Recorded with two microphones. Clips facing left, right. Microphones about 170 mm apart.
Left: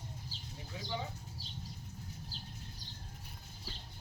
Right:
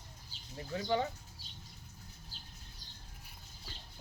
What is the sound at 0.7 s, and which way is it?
Speech, 65° right (ahead or behind).